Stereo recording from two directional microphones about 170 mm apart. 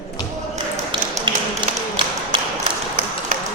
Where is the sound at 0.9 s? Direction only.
30° right (ahead or behind).